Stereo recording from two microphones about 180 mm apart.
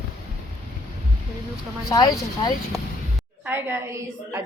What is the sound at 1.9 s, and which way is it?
Speech, 20° left (ahead or behind).